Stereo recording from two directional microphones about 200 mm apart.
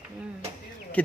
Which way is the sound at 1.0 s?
5° left (ahead or behind).